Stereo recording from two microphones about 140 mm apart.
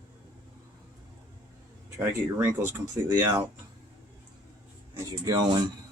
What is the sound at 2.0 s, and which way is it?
Speech, 20° right (ahead or behind).